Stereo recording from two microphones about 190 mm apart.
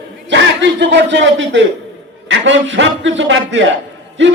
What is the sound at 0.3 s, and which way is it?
A man's voice, 70° right (ahead or behind).